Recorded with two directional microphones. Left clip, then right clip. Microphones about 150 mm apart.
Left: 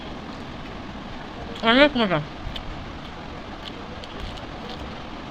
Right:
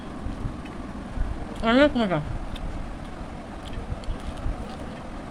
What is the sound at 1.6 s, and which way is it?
Speech, 10° right (ahead or behind).